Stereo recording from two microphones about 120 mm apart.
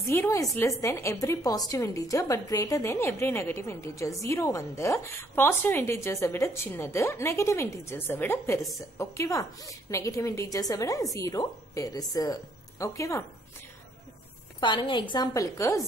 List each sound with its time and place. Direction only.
0.0 s a woman's voice: 25° left (ahead or behind)
14.6 s a woman's voice: 40° left (ahead or behind)
15.3 s a woman's voice: 25° left (ahead or behind)